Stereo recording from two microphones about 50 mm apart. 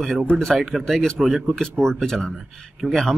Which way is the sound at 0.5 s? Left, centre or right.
Centre.